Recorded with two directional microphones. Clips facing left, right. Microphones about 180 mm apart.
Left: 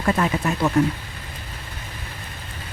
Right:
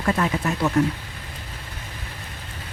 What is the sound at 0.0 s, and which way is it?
Speech, 25° left (ahead or behind).